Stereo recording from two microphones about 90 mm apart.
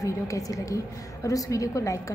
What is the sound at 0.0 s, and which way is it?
A woman's voice, 40° left (ahead or behind).